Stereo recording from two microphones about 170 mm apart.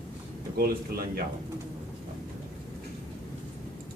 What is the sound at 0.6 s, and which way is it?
Speech, 65° right (ahead or behind).